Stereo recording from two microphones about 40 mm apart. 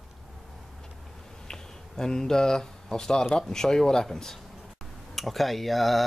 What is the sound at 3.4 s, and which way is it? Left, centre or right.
Speech, centre.